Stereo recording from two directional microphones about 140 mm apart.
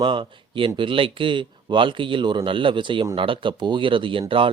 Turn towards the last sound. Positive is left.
turn(degrees=-35)  # may be behind; listen again after turning